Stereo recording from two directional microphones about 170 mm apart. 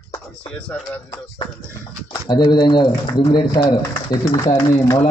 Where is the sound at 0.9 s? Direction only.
25° left (ahead or behind).